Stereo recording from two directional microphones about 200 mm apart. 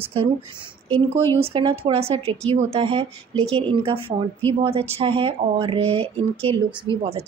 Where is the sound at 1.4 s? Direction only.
25° right (ahead or behind).